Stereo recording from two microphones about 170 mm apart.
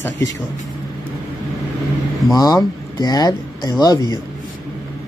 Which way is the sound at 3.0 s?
25° left (ahead or behind).